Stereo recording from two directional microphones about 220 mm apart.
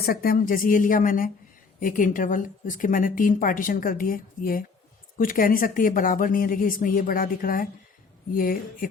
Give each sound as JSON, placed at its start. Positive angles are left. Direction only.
{"t": 0.0, "sound": "a woman's voice", "side_deg": 45}